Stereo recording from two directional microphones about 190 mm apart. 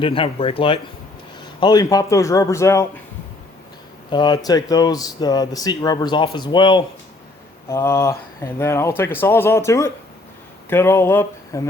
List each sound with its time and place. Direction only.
0.0 s speech: 30° left (ahead or behind)
4.1 s speech: 25° left (ahead or behind)